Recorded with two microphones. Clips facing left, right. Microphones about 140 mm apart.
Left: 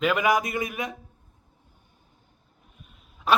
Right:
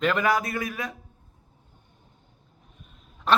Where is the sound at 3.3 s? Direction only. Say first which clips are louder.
Even; 10° left (ahead or behind).